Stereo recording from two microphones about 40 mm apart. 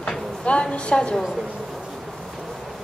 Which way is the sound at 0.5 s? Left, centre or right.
Left.